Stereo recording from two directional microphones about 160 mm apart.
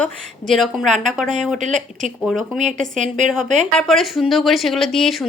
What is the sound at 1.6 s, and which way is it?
Speech, 50° right (ahead or behind).